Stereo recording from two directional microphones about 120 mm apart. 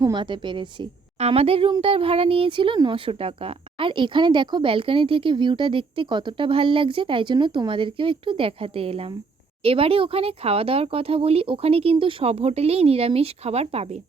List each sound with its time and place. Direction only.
0.0 s a woman's voice: 40° right (ahead or behind)
1.2 s speech: 55° right (ahead or behind)